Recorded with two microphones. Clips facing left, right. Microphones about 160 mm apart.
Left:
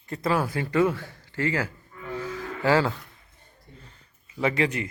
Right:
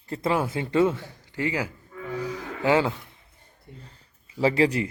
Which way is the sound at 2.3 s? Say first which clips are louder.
Even; 20° right (ahead or behind).